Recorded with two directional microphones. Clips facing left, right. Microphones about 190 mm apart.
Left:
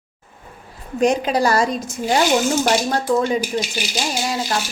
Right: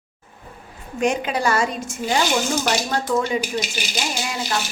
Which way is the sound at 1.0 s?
35° left (ahead or behind).